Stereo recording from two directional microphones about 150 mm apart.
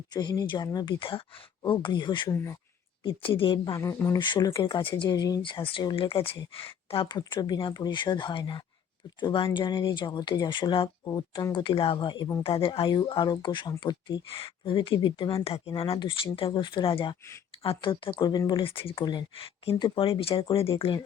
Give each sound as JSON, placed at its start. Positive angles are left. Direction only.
{"t": 0.1, "sound": "speech", "side_deg": 25}
{"t": 2.3, "sound": "speech", "side_deg": 15}
{"t": 3.0, "sound": "speech", "side_deg": 35}
{"t": 11.0, "sound": "speech", "side_deg": 20}
{"t": 11.5, "sound": "speech", "side_deg": 35}